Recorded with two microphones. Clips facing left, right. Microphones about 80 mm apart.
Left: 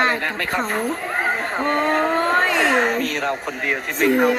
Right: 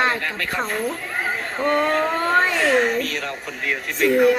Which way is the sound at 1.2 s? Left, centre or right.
Left.